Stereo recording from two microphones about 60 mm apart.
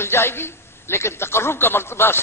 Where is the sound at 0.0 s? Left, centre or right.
Left.